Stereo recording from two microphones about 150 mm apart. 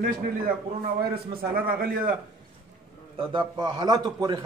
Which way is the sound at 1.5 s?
85° right.